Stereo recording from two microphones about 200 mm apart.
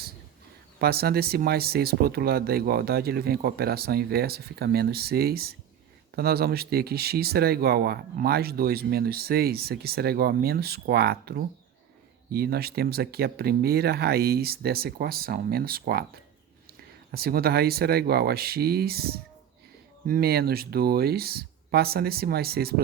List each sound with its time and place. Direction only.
0.8 s speech: 50° right (ahead or behind)